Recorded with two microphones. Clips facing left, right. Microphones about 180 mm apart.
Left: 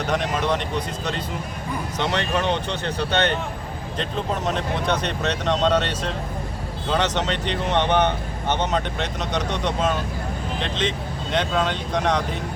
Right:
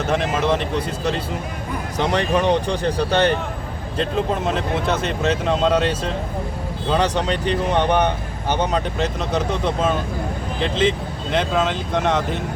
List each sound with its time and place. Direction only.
0.0 s speech: 5° right (ahead or behind)
2.1 s speech: 10° right (ahead or behind)
4.9 s speech: 5° right (ahead or behind)
7.0 s speech: 35° right (ahead or behind)
7.3 s speech: 10° right (ahead or behind)